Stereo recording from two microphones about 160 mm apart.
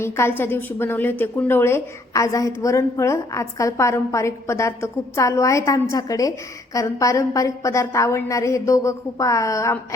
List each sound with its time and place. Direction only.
0.0 s a woman's voice: 15° left (ahead or behind)